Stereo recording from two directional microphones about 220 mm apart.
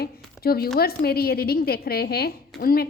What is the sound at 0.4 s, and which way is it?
A woman's voice, 45° left (ahead or behind).